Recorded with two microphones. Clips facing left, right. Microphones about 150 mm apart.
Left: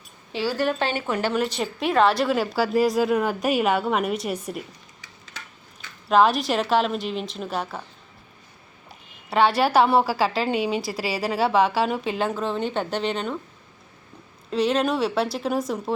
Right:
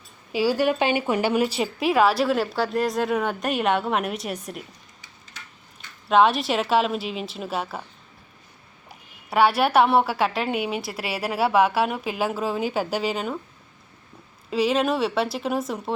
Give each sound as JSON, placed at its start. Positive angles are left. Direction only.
{"t": 0.3, "sound": "a woman's voice", "side_deg": -10}
{"t": 6.1, "sound": "a woman's voice", "side_deg": 0}
{"t": 9.3, "sound": "a woman's voice", "side_deg": -5}
{"t": 14.5, "sound": "a woman's voice", "side_deg": -5}